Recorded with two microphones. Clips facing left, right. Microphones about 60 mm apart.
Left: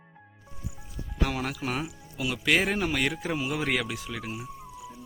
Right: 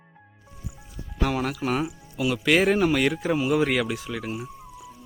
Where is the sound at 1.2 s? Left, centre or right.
Centre.